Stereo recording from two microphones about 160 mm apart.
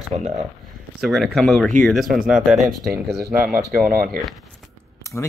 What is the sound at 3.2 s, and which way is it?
Speech, 10° right (ahead or behind).